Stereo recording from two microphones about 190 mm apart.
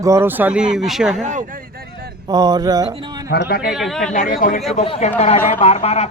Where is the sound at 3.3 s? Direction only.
55° left (ahead or behind).